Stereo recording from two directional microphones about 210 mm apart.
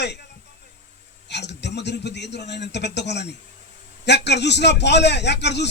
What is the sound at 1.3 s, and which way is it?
A man's voice, 55° left (ahead or behind).